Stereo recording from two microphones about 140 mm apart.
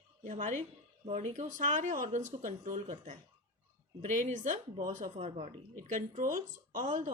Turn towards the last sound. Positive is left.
turn(degrees=-65)  # may be behind; listen again after turning